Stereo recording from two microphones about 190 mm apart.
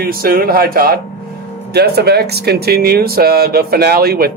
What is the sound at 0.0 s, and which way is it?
Speech, 50° right (ahead or behind).